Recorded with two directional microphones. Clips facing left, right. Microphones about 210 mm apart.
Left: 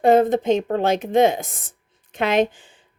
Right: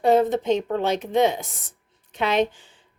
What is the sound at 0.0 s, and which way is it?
Speech, 50° left (ahead or behind).